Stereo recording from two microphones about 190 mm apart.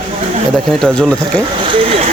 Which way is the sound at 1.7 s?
30° right (ahead or behind).